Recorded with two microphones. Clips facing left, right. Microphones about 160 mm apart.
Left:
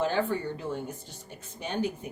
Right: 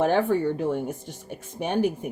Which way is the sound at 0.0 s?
70° right (ahead or behind).